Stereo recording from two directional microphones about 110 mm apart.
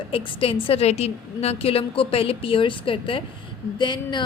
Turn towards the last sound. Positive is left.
turn(degrees=45)  # may be behind; listen again after turning